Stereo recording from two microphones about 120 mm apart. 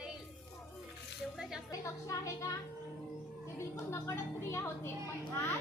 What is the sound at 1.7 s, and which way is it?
Music, 30° left (ahead or behind).